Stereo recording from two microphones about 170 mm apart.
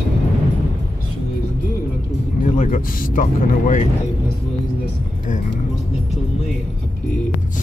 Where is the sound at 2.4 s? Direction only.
50° left (ahead or behind).